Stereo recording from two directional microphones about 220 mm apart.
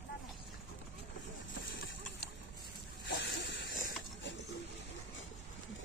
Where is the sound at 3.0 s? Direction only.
50° left (ahead or behind).